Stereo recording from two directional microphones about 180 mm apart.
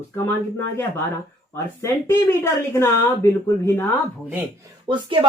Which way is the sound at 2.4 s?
15° left (ahead or behind).